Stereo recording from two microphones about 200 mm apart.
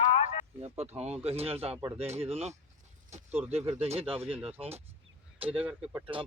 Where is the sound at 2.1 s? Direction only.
30° right (ahead or behind).